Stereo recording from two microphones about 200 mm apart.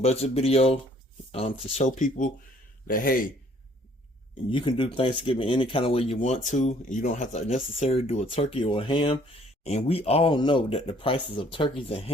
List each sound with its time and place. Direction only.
0.0 s a man's voice: 30° left (ahead or behind)
4.4 s speech: 25° left (ahead or behind)